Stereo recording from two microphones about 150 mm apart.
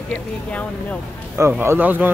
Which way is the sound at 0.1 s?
10° left (ahead or behind).